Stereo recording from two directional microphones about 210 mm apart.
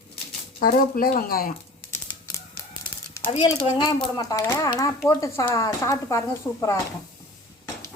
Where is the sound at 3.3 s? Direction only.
25° left (ahead or behind).